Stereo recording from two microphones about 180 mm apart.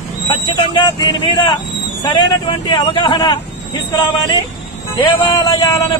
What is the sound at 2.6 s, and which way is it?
Speech, 25° left (ahead or behind).